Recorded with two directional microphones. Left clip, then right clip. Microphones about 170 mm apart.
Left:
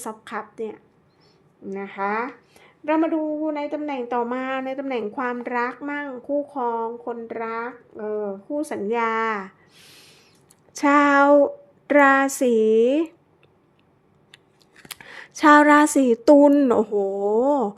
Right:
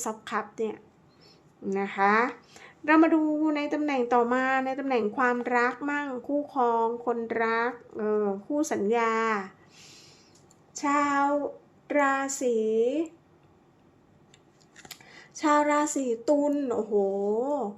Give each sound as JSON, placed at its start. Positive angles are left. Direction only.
{"t": 0.0, "sound": "a woman's voice", "side_deg": 15}
{"t": 4.4, "sound": "a woman's voice", "side_deg": 15}
{"t": 8.7, "sound": "speech", "side_deg": 20}
{"t": 9.8, "sound": "owl", "side_deg": 40}
{"t": 10.8, "sound": "speech", "side_deg": 50}
{"t": 14.8, "sound": "speech", "side_deg": 50}